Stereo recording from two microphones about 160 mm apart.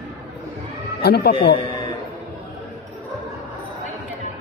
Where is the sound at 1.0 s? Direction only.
85° left.